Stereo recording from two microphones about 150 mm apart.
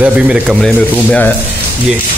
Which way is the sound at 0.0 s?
5° right (ahead or behind).